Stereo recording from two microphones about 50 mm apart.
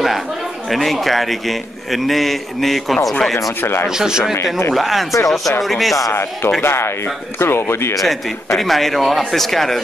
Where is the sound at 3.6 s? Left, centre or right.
Left.